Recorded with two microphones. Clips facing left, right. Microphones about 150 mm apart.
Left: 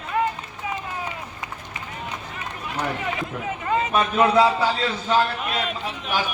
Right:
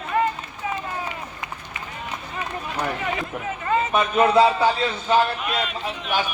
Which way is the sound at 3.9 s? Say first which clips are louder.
Right 1 dB; 20° right (ahead or behind).